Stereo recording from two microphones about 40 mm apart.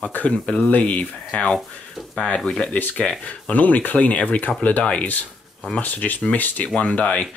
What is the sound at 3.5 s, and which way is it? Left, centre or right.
Speech, left.